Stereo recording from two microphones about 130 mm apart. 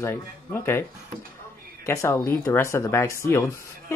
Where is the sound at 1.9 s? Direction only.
20° left (ahead or behind).